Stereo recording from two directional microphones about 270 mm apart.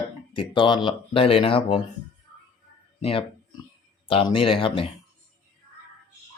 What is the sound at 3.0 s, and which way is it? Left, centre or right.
Speech, centre.